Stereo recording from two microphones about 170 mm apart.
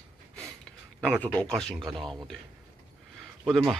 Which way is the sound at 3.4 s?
Centre (ahead or behind).